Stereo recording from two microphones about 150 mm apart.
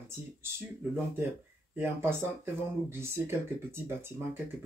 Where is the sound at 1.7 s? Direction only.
15° right (ahead or behind).